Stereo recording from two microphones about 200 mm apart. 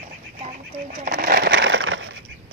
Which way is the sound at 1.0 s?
50° right (ahead or behind).